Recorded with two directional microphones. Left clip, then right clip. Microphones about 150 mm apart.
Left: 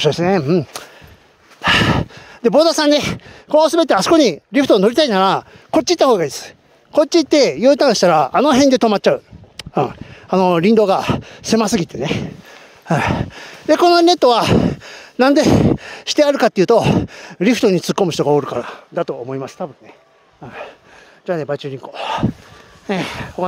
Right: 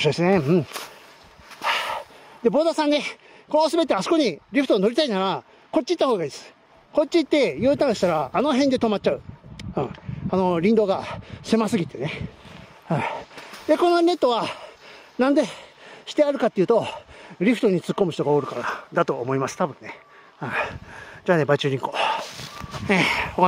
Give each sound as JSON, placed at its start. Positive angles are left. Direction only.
{"t": 0.1, "sound": "speech", "side_deg": 10}
{"t": 1.6, "sound": "a sound", "side_deg": 50}
{"t": 2.5, "sound": "speech", "side_deg": 55}
{"t": 3.4, "sound": "speech", "side_deg": 40}
{"t": 17.2, "sound": "speech", "side_deg": 40}
{"t": 18.7, "sound": "speech", "side_deg": 5}
{"t": 20.3, "sound": "a sound", "side_deg": -20}
{"t": 21.3, "sound": "speech", "side_deg": -20}
{"t": 22.8, "sound": "speech", "side_deg": 5}